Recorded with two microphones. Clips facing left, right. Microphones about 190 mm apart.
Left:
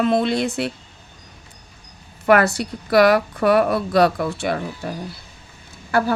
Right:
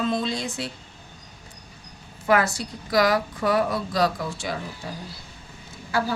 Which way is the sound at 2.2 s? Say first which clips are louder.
Left 6 dB; 65° left (ahead or behind).